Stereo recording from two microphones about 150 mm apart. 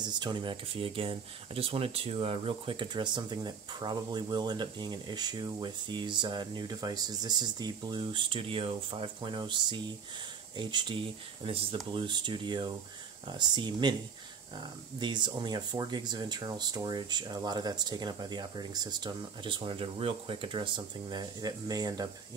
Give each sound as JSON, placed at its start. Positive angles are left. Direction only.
{"t": 0.0, "sound": "speech", "side_deg": -30}